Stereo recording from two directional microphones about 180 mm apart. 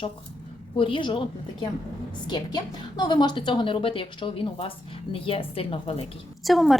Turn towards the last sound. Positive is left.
turn(degrees=0)  # may be behind; listen again after turning